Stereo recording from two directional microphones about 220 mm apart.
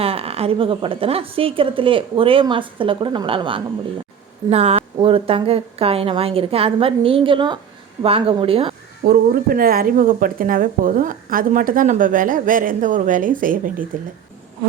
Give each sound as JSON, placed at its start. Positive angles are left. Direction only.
{"t": 0.0, "sound": "a woman's voice", "side_deg": -25}
{"t": 9.0, "sound": "speech", "side_deg": -40}